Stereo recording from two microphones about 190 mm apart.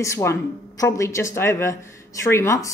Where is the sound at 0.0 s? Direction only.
15° left (ahead or behind).